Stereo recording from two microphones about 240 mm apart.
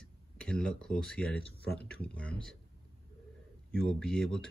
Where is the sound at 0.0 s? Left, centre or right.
Centre.